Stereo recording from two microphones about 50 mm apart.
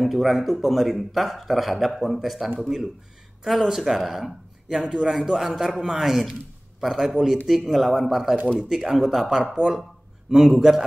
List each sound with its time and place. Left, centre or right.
0.0 s a man's voice: centre